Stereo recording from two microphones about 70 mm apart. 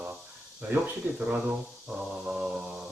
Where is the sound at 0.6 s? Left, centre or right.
Right.